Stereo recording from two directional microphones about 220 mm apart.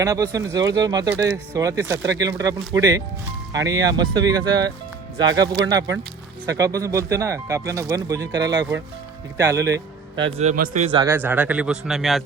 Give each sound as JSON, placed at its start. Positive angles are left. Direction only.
{"t": 0.0, "sound": "speech", "side_deg": -15}
{"t": 10.2, "sound": "a man's voice", "side_deg": -25}
{"t": 10.9, "sound": "speech", "side_deg": -10}